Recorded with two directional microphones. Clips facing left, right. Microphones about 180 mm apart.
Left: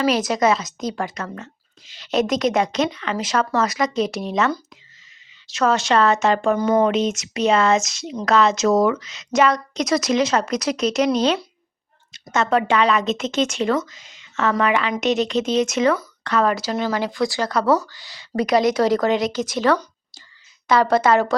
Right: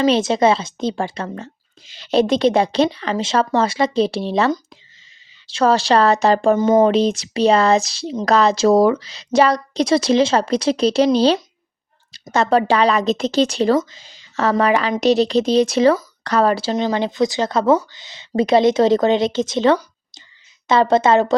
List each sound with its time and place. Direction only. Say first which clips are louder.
0.0 s speech: right 4 dB; 25° right (ahead or behind)